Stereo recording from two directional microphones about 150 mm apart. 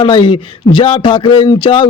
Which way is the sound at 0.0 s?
35° left (ahead or behind).